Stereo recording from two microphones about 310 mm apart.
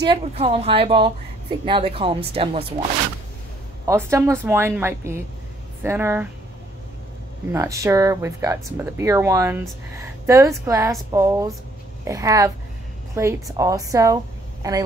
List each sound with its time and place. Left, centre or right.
0.0 s speech: centre
3.8 s speech: centre
7.5 s a woman's voice: centre